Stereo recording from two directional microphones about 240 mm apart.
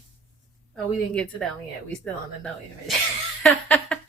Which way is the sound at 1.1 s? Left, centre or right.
Centre.